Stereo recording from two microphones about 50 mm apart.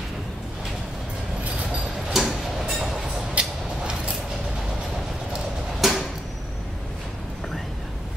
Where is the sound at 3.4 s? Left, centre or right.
Right.